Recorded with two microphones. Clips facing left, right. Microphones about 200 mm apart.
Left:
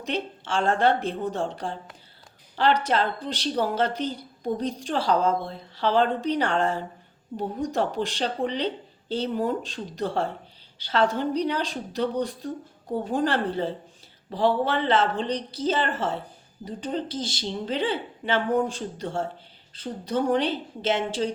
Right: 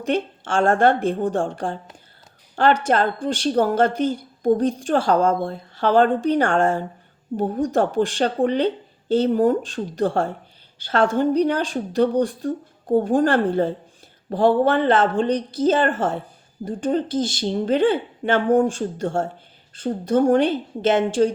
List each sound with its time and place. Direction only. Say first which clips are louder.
0.0 s a woman's voice: right 7 dB; 50° right (ahead or behind)